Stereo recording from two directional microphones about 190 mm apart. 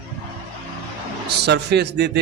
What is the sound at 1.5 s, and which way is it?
Speech, 60° right (ahead or behind).